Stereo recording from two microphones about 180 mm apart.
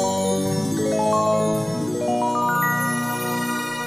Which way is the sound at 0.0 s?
Centre (ahead or behind).